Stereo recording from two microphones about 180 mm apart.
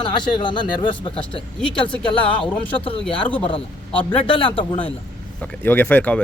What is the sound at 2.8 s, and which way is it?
A man's voice, 30° left (ahead or behind).